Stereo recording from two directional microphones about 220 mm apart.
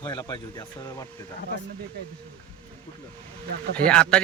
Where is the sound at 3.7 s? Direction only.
5° left (ahead or behind).